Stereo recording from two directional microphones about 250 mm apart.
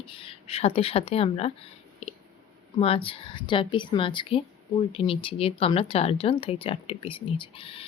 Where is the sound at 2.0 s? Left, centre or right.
Left.